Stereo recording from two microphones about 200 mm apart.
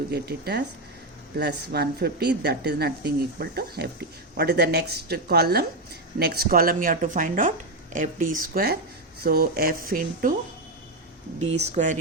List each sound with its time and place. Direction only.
0.1 s speech: 55° right (ahead or behind)
11.3 s speech: 30° right (ahead or behind)